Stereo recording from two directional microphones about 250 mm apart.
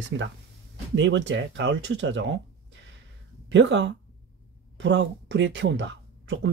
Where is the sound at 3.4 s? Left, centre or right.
Right.